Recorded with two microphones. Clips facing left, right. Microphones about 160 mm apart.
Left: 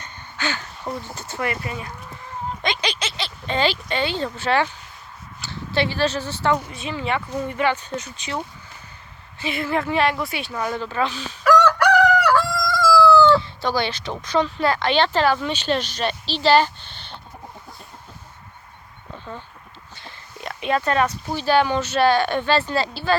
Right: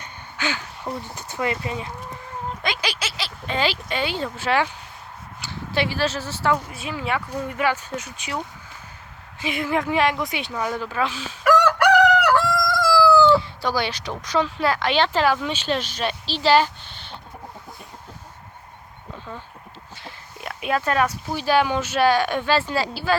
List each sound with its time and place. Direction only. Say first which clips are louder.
0.0 s a sound: even; 10° right (ahead or behind)
1.1 s speech: right 3 dB; 15° right (ahead or behind)
2.6 s speech: left 2 dB; 5° right (ahead or behind)
9.4 s speech: even; 15° right (ahead or behind)
20.1 s speech: left 1 dB; 5° right (ahead or behind)